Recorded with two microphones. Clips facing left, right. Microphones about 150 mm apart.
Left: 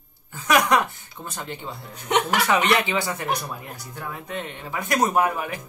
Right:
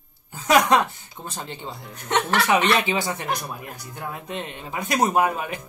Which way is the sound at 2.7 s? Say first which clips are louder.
Even; 20° right (ahead or behind).